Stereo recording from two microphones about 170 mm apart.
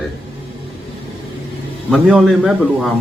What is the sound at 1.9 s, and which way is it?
Speech, centre (ahead or behind).